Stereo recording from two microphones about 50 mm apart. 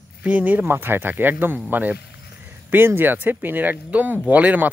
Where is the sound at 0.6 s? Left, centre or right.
Right.